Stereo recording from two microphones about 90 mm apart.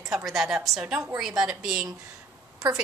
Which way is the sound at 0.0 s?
Centre (ahead or behind).